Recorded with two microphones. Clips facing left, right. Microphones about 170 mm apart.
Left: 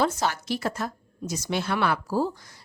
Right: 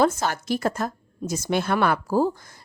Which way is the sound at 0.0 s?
50° right (ahead or behind).